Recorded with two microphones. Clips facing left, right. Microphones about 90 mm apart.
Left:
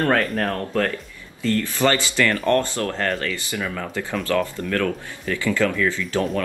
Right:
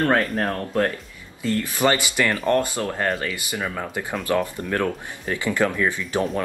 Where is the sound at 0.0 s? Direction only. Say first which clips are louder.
Even; 20° right (ahead or behind).